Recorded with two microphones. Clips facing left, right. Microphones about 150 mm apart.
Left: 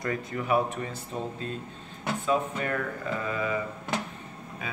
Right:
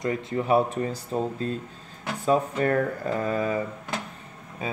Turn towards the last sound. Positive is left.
turn(degrees=-30)  # may be behind; listen again after turning